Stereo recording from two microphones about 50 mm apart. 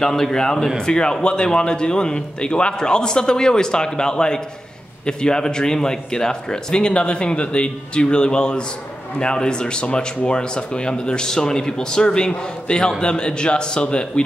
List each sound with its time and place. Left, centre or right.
0.0 s speech: centre